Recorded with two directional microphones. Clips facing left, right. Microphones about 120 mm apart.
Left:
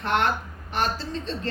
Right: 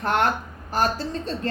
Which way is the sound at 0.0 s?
35° right (ahead or behind).